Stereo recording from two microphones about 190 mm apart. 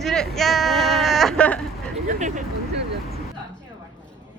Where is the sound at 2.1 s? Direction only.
45° right (ahead or behind).